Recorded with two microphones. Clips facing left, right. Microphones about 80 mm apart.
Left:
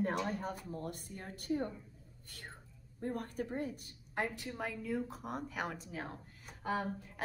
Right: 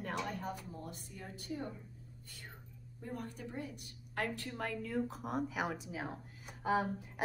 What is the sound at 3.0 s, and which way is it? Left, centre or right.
Speech, left.